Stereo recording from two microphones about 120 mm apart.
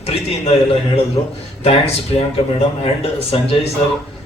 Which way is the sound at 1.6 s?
60° left (ahead or behind).